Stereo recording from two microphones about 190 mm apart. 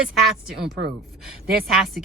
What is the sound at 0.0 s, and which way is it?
Speech, centre (ahead or behind).